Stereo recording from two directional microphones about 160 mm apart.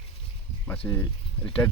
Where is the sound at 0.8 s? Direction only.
10° left (ahead or behind).